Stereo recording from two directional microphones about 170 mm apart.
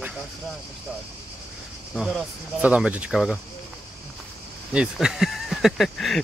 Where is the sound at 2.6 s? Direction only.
10° right (ahead or behind).